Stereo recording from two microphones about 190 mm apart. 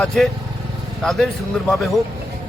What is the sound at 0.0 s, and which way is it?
Speech, 5° left (ahead or behind).